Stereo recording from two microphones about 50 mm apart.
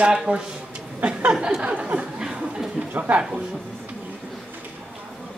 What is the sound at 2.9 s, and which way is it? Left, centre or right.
Speech, right.